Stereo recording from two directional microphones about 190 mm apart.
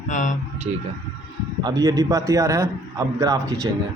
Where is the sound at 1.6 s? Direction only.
20° right (ahead or behind).